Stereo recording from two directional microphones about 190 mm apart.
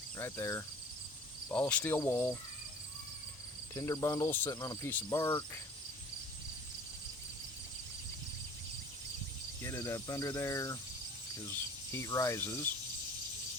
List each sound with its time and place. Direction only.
0.2 s cricket: 15° left (ahead or behind)
3.8 s cricket: 15° left (ahead or behind)
9.6 s cricket: 15° left (ahead or behind)